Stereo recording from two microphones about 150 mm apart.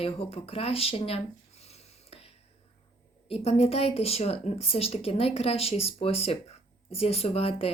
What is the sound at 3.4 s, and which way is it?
Speech, 40° left (ahead or behind).